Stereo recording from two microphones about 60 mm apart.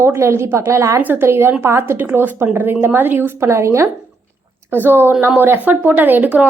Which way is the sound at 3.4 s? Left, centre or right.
Right.